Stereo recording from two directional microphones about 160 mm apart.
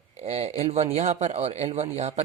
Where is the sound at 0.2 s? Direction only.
40° right (ahead or behind).